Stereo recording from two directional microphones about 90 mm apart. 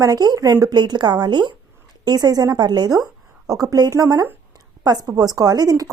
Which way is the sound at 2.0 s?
45° right (ahead or behind).